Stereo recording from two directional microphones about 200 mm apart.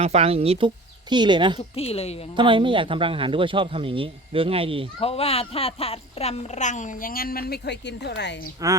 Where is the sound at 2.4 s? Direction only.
25° right (ahead or behind).